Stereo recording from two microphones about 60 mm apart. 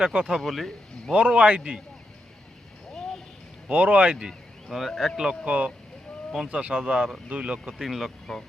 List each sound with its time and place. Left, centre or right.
0.0 s speech: centre
0.3 s speech: centre
1.1 s speech: centre
3.7 s speech: right
4.3 s speech: centre
5.5 s speech: right
7.7 s speech: centre